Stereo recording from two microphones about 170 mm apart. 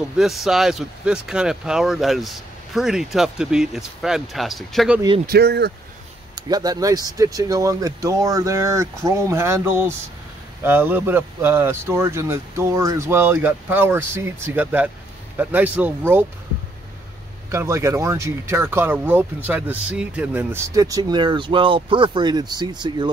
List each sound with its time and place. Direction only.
0.2 s speech: centre (ahead or behind)
5.2 s speech: 70° right (ahead or behind)
6.3 s speech: 25° right (ahead or behind)
17.5 s speech: 15° right (ahead or behind)